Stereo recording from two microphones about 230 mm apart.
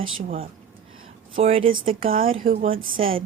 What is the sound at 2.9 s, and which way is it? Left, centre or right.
Speech, right.